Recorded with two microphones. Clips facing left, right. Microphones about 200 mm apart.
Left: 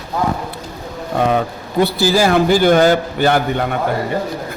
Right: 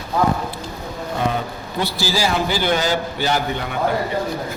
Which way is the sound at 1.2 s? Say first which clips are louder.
Left 7 dB; 55° left (ahead or behind).